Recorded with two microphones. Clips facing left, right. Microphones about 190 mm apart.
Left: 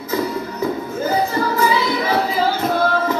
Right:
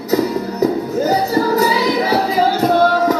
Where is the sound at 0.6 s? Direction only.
40° right (ahead or behind).